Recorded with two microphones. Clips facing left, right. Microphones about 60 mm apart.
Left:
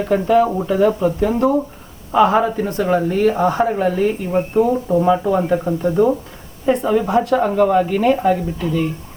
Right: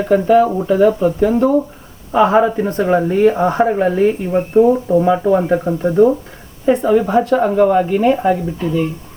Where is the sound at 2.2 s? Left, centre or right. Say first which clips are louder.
Right 3 dB; right.